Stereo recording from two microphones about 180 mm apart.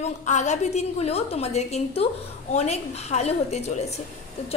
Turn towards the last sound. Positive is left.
turn(degrees=35)  # may be behind; listen again after turning